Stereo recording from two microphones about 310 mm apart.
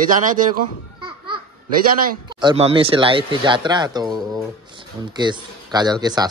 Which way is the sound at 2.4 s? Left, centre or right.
Centre.